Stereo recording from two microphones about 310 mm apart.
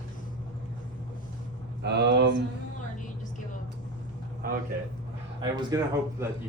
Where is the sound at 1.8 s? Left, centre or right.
Right.